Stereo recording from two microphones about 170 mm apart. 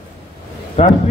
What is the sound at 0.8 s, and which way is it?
Speech, 40° left (ahead or behind).